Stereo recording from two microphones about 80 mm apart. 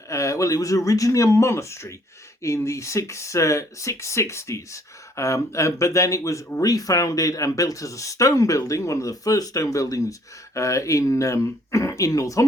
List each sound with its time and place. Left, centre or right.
0.1 s speech: left